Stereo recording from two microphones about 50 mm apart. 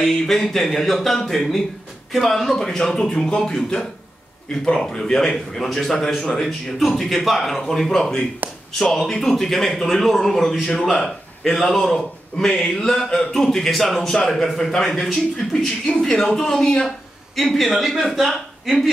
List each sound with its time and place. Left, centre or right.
0.0 s a man's voice: centre
8.4 s a sound: right
8.9 s a man's voice: centre
12.4 s speech: centre
17.4 s a man's voice: centre